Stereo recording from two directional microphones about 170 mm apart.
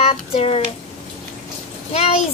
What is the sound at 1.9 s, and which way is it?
Speech, 40° left (ahead or behind).